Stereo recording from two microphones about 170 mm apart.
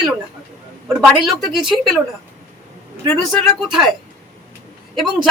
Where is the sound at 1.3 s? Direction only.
Centre (ahead or behind).